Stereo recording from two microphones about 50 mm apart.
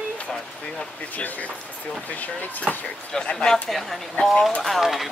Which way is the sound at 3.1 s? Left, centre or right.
Centre.